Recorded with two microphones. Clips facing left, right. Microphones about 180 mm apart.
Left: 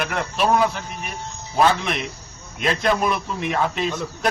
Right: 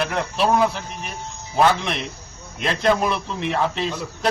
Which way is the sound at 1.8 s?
30° right (ahead or behind).